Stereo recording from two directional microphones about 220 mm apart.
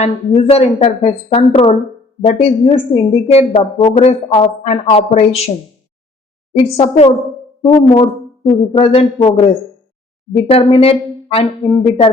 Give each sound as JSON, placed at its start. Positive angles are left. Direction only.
{"t": 0.0, "sound": "speech", "side_deg": 25}
{"t": 6.7, "sound": "speech", "side_deg": 25}
{"t": 10.3, "sound": "speech", "side_deg": 25}